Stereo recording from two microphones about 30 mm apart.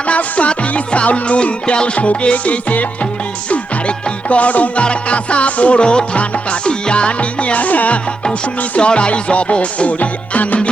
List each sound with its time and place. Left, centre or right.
0.1 s music: left
2.0 s music: left
3.8 s music: left
4.8 s music: left
5.8 s music: left
6.1 s music: left
8.8 s music: left